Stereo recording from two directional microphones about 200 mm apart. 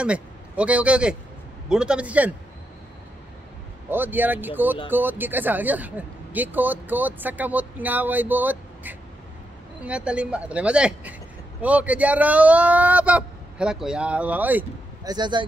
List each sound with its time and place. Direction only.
0.0 s a man's voice: 5° right (ahead or behind)
3.9 s speech: 10° right (ahead or behind)
15.0 s speech: 20° right (ahead or behind)